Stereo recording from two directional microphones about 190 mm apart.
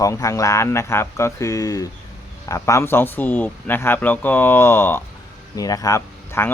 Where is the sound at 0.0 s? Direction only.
15° left (ahead or behind).